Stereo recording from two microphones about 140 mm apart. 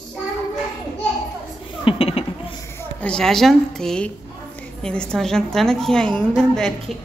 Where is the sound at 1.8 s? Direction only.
40° left (ahead or behind).